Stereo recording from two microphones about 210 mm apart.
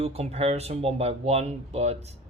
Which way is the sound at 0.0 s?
30° right (ahead or behind).